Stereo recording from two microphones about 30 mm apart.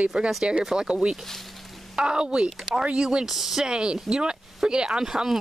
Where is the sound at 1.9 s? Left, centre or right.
Right.